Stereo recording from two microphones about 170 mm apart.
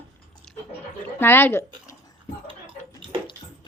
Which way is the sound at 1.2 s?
15° left (ahead or behind).